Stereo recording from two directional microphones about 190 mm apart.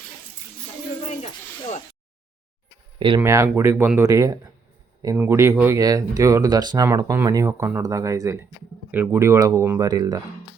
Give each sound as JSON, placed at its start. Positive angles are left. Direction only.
{"t": 1.0, "sound": "speech", "side_deg": 35}
{"t": 3.2, "sound": "speech", "side_deg": -15}